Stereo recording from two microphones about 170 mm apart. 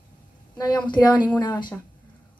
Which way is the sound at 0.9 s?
25° left (ahead or behind).